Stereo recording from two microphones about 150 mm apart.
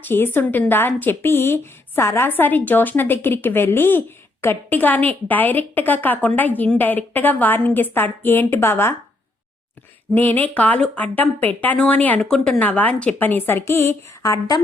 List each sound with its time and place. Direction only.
0.0 s a woman's voice: 15° left (ahead or behind)
10.2 s a woman's voice: 10° left (ahead or behind)
13.7 s a sound: 20° left (ahead or behind)